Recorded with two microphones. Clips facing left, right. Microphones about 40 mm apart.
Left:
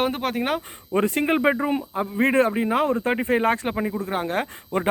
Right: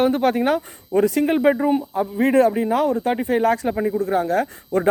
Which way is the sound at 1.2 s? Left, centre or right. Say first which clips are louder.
Right 2 dB; left.